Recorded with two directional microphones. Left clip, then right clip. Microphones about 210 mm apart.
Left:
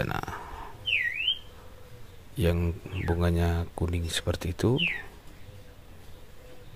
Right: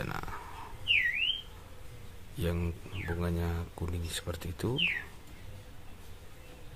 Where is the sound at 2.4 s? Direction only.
25° left (ahead or behind).